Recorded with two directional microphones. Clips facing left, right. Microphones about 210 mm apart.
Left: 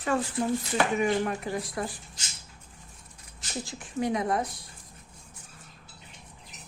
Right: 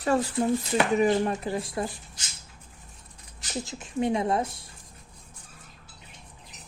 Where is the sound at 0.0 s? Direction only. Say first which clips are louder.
Right 3 dB; 40° right (ahead or behind).